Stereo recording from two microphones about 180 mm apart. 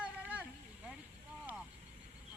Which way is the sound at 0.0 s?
10° right (ahead or behind).